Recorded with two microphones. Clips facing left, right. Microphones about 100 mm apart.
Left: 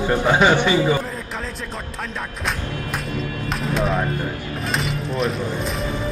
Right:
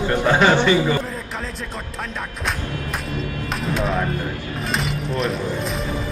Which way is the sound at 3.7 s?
Centre (ahead or behind).